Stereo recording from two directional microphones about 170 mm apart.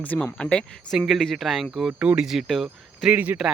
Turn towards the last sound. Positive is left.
turn(degrees=-5)  # may be behind; listen again after turning